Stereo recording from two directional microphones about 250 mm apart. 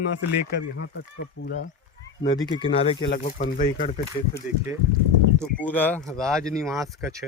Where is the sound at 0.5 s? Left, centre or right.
Left.